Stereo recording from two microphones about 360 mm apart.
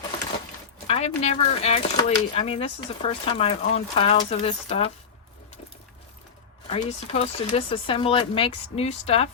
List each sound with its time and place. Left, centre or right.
0.9 s speech: centre
6.7 s speech: centre